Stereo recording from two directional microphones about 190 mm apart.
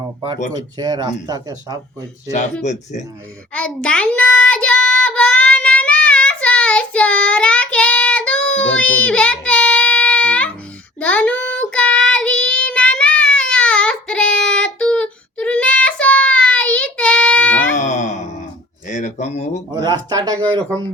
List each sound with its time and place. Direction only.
0.5 s speech: 20° right (ahead or behind)
3.5 s child singing: 5° left (ahead or behind)
17.7 s music: 40° left (ahead or behind)
18.9 s a sound: 40° left (ahead or behind)
19.7 s speech: 20° right (ahead or behind)